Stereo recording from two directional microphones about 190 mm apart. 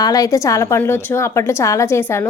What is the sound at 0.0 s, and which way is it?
A woman's voice, 20° left (ahead or behind).